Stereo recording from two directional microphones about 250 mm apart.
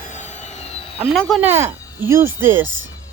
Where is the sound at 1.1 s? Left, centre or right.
Centre.